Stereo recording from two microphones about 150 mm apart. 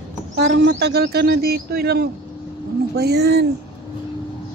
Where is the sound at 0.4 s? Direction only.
90° right.